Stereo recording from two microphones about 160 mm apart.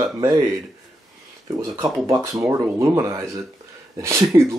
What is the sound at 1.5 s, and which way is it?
Speech, 15° right (ahead or behind).